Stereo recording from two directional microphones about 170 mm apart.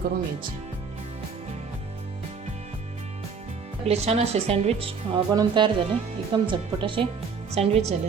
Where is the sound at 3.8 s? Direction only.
40° right (ahead or behind).